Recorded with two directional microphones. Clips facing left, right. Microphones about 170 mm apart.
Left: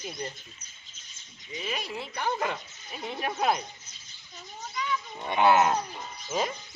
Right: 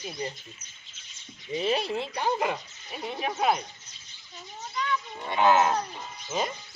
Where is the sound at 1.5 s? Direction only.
35° right (ahead or behind); by 2.6 s 15° right (ahead or behind).